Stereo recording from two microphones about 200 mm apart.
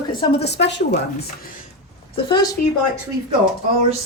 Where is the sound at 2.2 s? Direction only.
20° left (ahead or behind).